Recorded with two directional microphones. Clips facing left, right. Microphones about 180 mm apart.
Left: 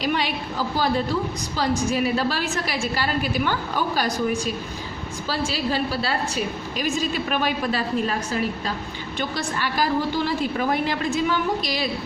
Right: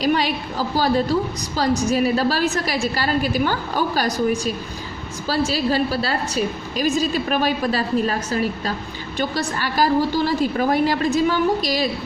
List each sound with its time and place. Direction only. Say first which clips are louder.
0.0 s a woman's voice: right 5 dB; 40° right (ahead or behind)
1.5 s a woman's voice: right 4 dB; 40° right (ahead or behind)